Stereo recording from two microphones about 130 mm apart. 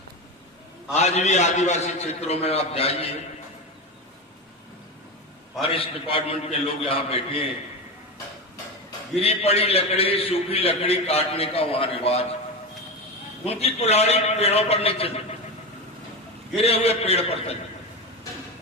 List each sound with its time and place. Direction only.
0.9 s a man's voice: 60° left (ahead or behind)
5.6 s a man's voice: 45° left (ahead or behind)
9.1 s a man's voice: 50° left (ahead or behind)
13.4 s a man's voice: 50° left (ahead or behind)
16.6 s a man's voice: 50° left (ahead or behind)